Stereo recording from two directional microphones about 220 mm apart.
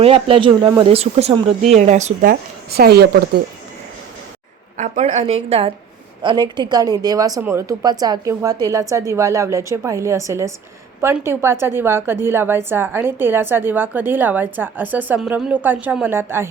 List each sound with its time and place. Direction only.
0.0 s a woman's voice: 25° right (ahead or behind); by 3.4 s 50° right (ahead or behind)
4.8 s a woman's voice: 30° right (ahead or behind); by 16.5 s 10° right (ahead or behind)